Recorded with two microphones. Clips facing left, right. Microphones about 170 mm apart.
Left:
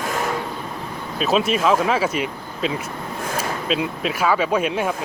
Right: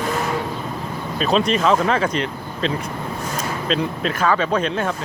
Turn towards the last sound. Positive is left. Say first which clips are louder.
# even
turn(degrees=10)  # may be behind; listen again after turning